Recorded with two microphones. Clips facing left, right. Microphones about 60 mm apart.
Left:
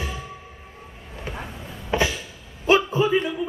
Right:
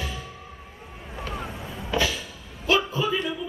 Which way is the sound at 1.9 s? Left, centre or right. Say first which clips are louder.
Left 2 dB; left.